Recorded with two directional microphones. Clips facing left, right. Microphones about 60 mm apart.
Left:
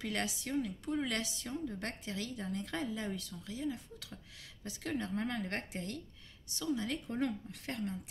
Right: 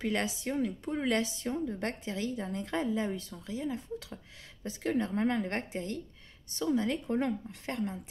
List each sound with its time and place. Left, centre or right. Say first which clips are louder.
0.0 s speech: right 6 dB; right